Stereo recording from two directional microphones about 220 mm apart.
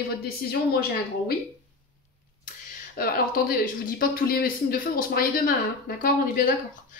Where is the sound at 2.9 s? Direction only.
40° left (ahead or behind).